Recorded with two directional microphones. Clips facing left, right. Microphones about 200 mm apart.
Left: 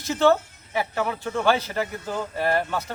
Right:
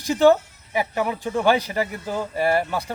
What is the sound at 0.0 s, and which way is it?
Speech, 15° right (ahead or behind).